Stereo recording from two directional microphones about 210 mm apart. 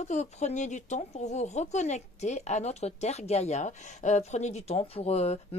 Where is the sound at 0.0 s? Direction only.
35° left (ahead or behind).